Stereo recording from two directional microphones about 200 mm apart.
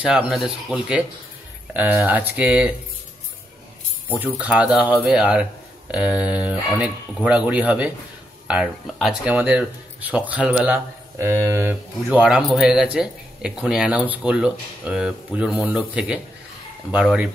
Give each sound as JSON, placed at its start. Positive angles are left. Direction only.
{"t": 0.0, "sound": "speech", "side_deg": -5}
{"t": 4.2, "sound": "speech", "side_deg": -5}